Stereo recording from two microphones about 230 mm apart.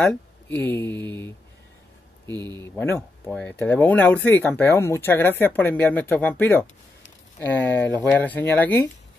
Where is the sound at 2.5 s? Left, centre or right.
Centre.